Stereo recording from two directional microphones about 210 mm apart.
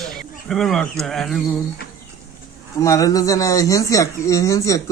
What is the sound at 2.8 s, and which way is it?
Speech, 15° left (ahead or behind).